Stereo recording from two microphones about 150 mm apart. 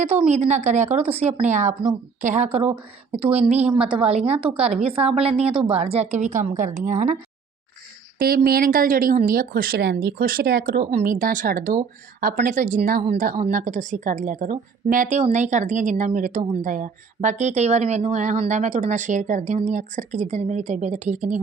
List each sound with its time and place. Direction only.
0.0 s speech: 50° right (ahead or behind)
3.5 s a woman's voice: 10° right (ahead or behind)
3.8 s speech: 35° right (ahead or behind)
4.5 s a woman's voice: 5° right (ahead or behind)
4.8 s speech: 40° right (ahead or behind)
8.2 s speech: 90° right
11.0 s a woman's voice: 65° right (ahead or behind)